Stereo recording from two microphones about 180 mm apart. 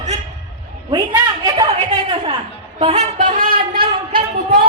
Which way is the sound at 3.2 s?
50° right (ahead or behind).